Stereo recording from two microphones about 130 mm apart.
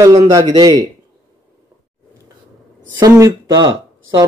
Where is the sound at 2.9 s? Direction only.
25° right (ahead or behind).